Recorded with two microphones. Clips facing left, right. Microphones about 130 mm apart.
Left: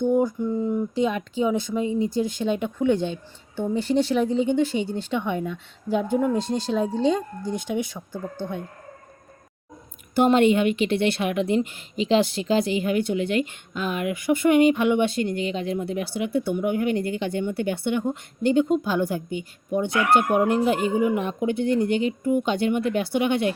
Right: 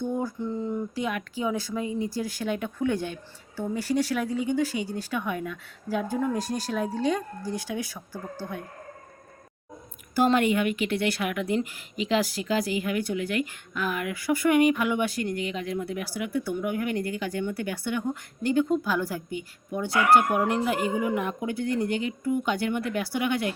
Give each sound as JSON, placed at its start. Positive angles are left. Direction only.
{"t": 0.0, "sound": "a sound", "side_deg": 20}
{"t": 0.9, "sound": "a woman's voice", "side_deg": 25}
{"t": 10.2, "sound": "a woman's voice", "side_deg": 25}